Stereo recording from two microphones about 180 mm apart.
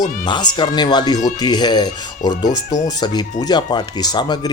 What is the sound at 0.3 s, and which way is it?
Speech, 25° left (ahead or behind).